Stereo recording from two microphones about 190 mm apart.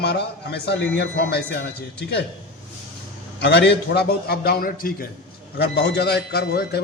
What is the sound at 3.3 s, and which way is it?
A man's voice, 60° left (ahead or behind).